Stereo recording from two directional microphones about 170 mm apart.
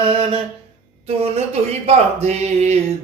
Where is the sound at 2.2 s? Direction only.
40° right (ahead or behind).